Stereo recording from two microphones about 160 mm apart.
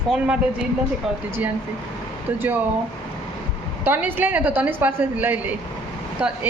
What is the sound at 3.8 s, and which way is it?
A woman's voice, 10° right (ahead or behind).